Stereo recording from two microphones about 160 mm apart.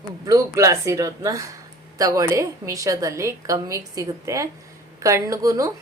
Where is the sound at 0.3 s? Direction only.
20° right (ahead or behind).